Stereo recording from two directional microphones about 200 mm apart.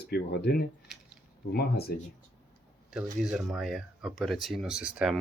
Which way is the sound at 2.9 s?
5° right (ahead or behind).